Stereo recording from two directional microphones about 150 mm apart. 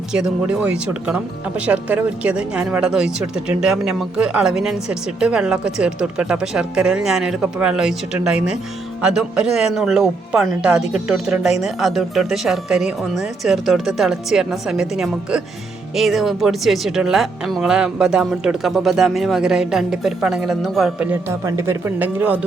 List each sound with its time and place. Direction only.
0.1 s speech: 5° right (ahead or behind)
21.1 s speech: 20° right (ahead or behind)